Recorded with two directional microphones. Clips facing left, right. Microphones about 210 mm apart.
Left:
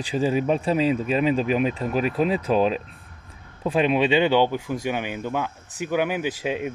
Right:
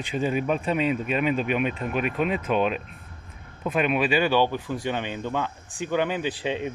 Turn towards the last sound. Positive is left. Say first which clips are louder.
# left 1 dB
turn(degrees=10)  # may be behind; listen again after turning